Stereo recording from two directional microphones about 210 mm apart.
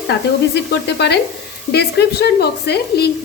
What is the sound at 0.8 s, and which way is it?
A woman's voice, 55° left (ahead or behind).